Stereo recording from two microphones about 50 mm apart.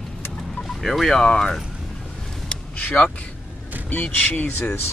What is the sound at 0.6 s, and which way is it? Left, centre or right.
Speech, centre.